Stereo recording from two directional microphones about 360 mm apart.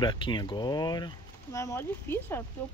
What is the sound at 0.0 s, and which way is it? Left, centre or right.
Speech, centre.